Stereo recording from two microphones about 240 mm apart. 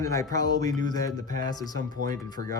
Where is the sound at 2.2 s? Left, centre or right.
Centre.